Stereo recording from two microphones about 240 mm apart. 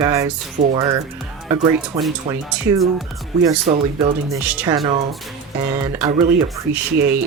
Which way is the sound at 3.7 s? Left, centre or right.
Right.